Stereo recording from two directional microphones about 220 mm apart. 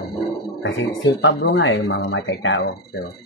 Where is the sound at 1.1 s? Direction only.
55° left (ahead or behind).